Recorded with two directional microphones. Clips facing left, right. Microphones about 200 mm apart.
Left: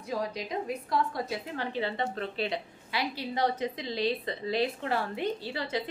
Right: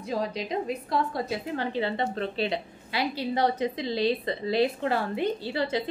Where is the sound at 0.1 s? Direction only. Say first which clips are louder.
Right 3 dB; 25° right (ahead or behind).